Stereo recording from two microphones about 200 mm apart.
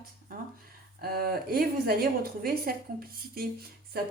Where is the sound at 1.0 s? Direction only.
50° right (ahead or behind).